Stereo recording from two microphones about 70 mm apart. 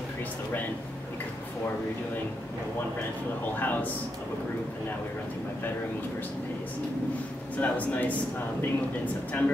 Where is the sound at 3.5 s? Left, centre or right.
Left.